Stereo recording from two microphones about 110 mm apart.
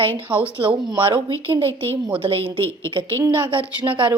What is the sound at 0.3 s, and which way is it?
A woman's voice, 50° right (ahead or behind).